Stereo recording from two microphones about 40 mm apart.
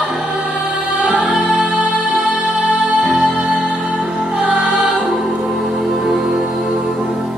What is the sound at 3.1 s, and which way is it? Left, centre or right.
Music, centre.